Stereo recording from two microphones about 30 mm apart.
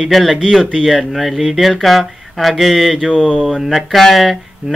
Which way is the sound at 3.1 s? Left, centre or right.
Left.